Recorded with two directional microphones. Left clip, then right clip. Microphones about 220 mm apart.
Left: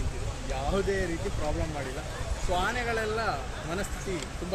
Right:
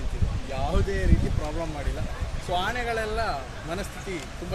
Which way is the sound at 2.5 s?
35° right (ahead or behind).